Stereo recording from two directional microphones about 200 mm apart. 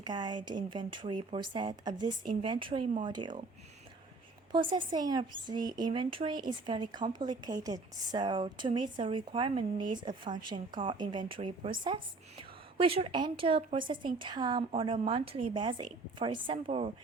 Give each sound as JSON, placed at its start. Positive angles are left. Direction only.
{"t": 0.0, "sound": "a woman's voice", "side_deg": -20}
{"t": 4.5, "sound": "a woman's voice", "side_deg": -20}